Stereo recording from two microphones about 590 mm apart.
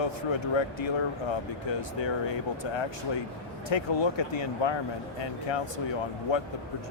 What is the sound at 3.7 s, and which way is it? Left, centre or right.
Speech, left.